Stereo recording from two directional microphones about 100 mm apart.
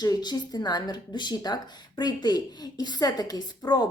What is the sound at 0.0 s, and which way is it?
A woman's voice, 45° left (ahead or behind).